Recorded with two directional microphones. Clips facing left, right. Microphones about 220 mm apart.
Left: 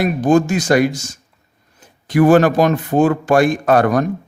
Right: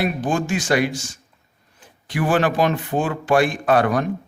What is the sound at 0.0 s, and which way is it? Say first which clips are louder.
A man's voice: left 8 dB; 40° left (ahead or behind).